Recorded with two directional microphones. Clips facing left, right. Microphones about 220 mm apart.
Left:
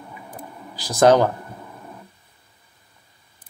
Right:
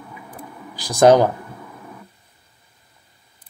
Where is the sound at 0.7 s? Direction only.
15° right (ahead or behind).